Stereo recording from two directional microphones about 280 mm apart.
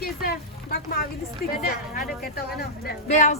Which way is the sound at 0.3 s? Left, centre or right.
Left.